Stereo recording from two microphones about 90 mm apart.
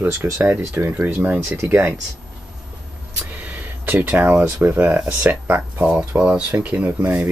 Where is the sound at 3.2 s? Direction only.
20° right (ahead or behind).